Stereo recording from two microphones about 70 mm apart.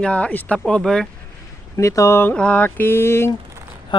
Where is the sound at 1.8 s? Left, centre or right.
Left.